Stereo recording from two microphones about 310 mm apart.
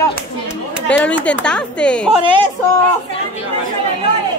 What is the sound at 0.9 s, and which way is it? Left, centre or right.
Speech, centre.